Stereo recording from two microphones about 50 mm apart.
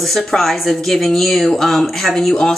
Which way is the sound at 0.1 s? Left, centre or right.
Centre.